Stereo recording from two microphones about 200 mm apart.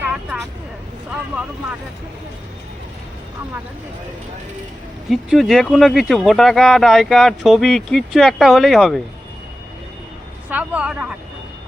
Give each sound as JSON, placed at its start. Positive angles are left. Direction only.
{"t": 0.0, "sound": "vehicle", "side_deg": -5}
{"t": 5.0, "sound": "speech", "side_deg": 0}
{"t": 10.5, "sound": "speech", "side_deg": -10}